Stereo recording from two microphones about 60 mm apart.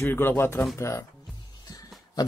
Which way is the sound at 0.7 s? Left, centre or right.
Left.